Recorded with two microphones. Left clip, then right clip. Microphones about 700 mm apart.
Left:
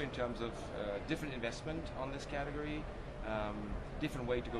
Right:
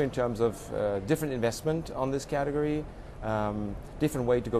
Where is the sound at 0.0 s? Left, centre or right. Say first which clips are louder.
Right 12 dB; right.